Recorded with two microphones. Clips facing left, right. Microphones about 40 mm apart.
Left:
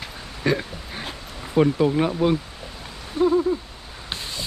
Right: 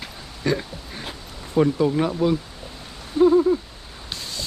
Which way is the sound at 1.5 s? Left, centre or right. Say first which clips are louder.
Even; centre.